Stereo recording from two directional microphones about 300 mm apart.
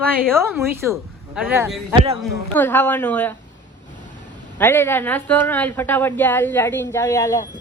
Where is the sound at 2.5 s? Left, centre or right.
Centre.